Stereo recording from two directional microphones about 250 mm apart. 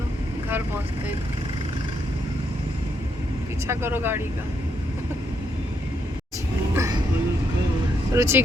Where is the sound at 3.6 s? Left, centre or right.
Centre.